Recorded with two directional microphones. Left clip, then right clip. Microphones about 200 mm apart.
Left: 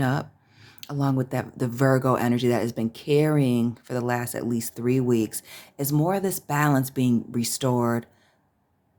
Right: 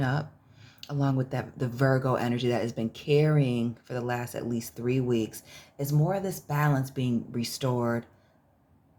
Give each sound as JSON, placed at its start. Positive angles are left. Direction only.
{"t": 0.0, "sound": "speech", "side_deg": 30}